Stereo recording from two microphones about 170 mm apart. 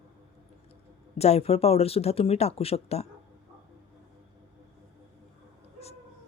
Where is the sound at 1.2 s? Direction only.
35° left (ahead or behind).